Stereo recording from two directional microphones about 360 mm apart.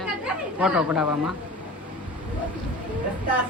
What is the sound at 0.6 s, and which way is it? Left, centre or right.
Speech, centre.